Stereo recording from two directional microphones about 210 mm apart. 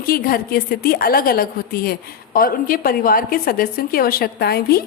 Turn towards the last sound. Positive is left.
turn(degrees=45)  # may be behind; listen again after turning